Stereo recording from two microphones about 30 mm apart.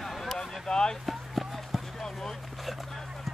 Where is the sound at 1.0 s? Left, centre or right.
Centre.